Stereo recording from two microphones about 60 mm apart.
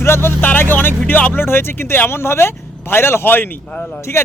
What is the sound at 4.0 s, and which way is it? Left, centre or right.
Speech, left.